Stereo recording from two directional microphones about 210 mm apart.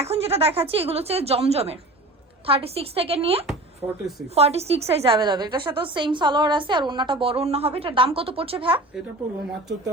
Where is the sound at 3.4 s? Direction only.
Centre (ahead or behind).